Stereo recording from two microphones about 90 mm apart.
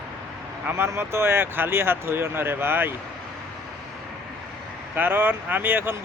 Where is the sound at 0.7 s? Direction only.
30° right (ahead or behind).